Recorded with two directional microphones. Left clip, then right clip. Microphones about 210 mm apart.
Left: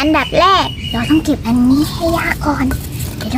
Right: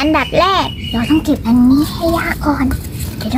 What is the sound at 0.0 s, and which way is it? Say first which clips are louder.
Speech: left 1 dB; 5° right (ahead or behind).